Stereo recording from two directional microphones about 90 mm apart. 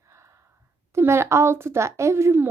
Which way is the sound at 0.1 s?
30° right (ahead or behind).